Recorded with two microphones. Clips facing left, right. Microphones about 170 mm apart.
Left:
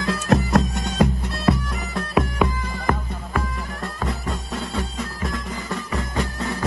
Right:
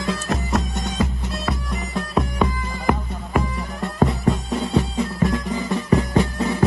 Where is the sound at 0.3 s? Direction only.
65° left (ahead or behind).